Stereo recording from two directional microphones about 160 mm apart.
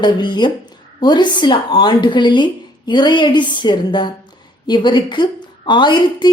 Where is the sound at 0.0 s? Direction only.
25° left (ahead or behind).